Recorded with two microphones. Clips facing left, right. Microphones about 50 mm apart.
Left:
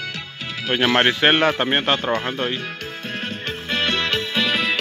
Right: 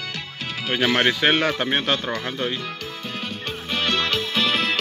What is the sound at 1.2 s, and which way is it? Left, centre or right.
Speech, left.